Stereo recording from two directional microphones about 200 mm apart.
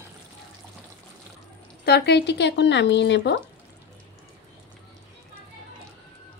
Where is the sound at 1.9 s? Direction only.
55° left (ahead or behind).